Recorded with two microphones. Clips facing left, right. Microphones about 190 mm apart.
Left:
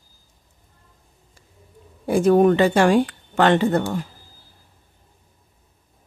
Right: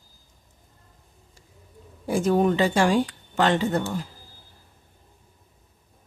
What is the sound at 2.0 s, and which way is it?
Speech, 60° left (ahead or behind).